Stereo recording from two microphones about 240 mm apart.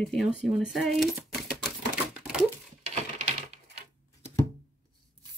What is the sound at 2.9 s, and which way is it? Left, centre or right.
Typewriter, right.